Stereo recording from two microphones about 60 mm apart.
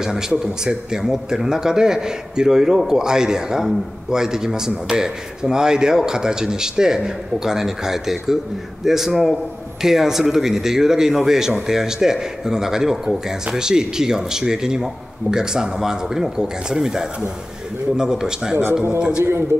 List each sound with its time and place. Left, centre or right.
0.0 s speech: centre